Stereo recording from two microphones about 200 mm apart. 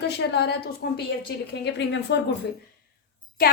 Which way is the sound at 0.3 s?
55° left (ahead or behind).